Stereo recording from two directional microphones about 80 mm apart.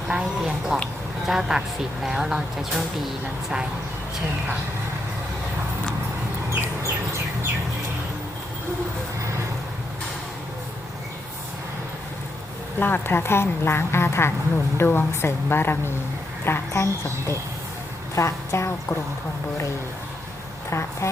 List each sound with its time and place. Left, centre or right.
0.1 s speech: centre
6.5 s bird: right
12.8 s a woman's voice: left
20.7 s speech: left